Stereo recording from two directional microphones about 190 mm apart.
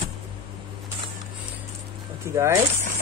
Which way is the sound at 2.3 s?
15° right (ahead or behind).